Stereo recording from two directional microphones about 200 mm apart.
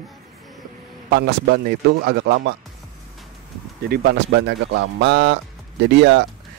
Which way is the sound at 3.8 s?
55° right (ahead or behind).